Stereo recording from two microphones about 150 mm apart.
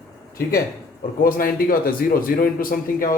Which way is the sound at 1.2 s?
75° left (ahead or behind).